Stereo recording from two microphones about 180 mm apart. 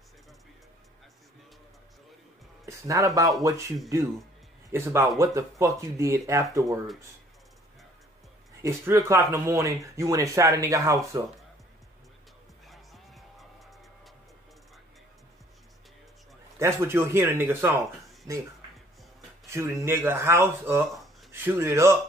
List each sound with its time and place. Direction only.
2.6 s speech: 15° right (ahead or behind)
4.6 s a man's voice: 15° right (ahead or behind)
8.6 s speech: 15° right (ahead or behind)
12.6 s music: centre (ahead or behind)
16.5 s speech: 15° right (ahead or behind)
19.5 s speech: 15° right (ahead or behind)